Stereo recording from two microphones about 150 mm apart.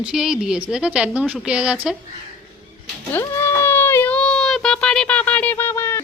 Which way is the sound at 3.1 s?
15° left (ahead or behind).